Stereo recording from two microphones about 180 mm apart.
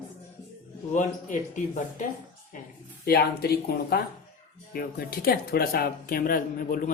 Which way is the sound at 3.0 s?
60° left (ahead or behind).